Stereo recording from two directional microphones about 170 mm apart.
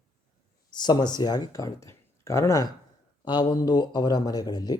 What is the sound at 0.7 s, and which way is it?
A man's voice, 25° left (ahead or behind).